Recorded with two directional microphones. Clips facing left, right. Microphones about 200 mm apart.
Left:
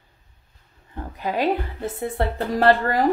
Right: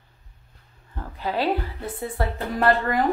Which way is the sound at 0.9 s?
15° left (ahead or behind).